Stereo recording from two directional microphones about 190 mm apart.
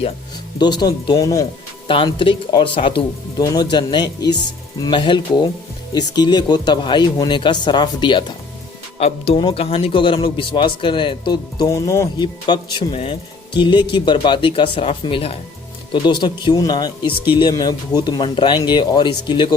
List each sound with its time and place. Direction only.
0.6 s a man's voice: 20° left (ahead or behind)